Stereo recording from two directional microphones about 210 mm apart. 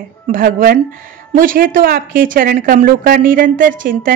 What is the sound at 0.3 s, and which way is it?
A woman's voice, 40° right (ahead or behind).